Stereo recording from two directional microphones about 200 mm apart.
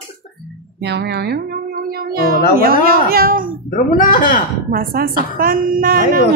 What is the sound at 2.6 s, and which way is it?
Speech, 45° right (ahead or behind).